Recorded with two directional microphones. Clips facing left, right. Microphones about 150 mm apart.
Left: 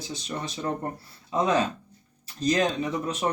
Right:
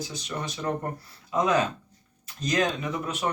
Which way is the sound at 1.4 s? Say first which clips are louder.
Even; 30° left (ahead or behind).